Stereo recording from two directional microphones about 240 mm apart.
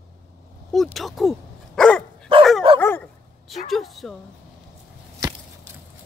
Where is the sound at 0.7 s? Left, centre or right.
Centre.